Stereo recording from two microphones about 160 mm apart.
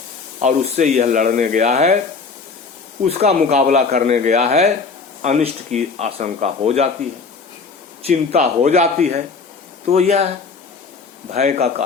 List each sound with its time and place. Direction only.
0.4 s speech: 45° right (ahead or behind)
3.0 s speech: 40° right (ahead or behind)
8.0 s speech: 45° right (ahead or behind)
11.3 s speech: 50° right (ahead or behind)